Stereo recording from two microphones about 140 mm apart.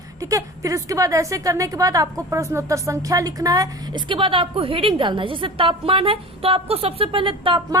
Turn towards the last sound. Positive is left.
turn(degrees=-35)  # may be behind; listen again after turning